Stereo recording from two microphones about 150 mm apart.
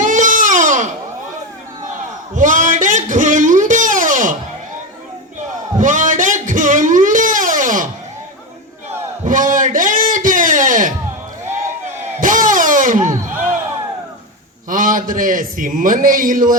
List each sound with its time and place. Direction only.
0.0 s baby cry: 60° right (ahead or behind)
2.3 s music: 60° right (ahead or behind)
5.8 s a sound: 60° right (ahead or behind)
9.2 s a sound: 60° right (ahead or behind)
12.2 s music: 60° right (ahead or behind)
14.7 s a man's voice: 65° right (ahead or behind)